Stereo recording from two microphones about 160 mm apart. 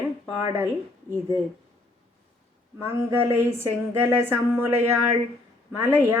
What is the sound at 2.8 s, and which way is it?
A woman's voice, 15° right (ahead or behind).